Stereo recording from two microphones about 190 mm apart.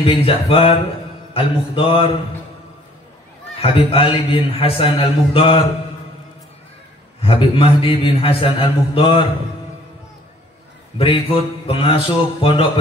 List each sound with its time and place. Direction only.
0.0 s a man's voice: 30° left (ahead or behind)
3.5 s a man's voice: 30° left (ahead or behind)
7.2 s a man's voice: 30° left (ahead or behind)
11.0 s a man's voice: 30° left (ahead or behind)